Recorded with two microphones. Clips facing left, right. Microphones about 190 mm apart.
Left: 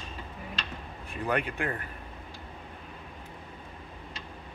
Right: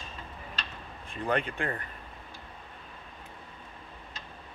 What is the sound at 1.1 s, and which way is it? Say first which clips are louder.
Speech: even; 10° left (ahead or behind).